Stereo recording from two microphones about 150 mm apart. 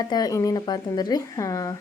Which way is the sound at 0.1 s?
25° left (ahead or behind).